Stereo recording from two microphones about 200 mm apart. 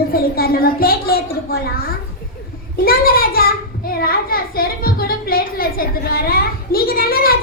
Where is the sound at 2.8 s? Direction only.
50° left (ahead or behind).